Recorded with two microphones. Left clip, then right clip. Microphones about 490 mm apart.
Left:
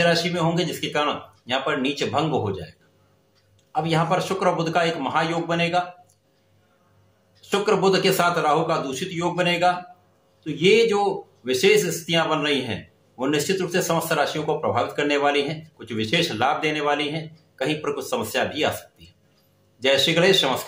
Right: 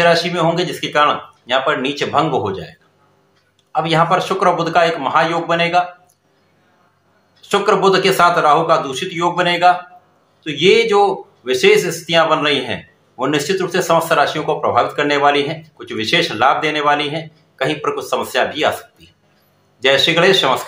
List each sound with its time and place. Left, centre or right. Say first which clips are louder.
0.0 s speech: right 7 dB; left
3.7 s speech: right 8 dB; left
7.5 s speech: right 7 dB; left
19.8 s speech: right 6 dB; left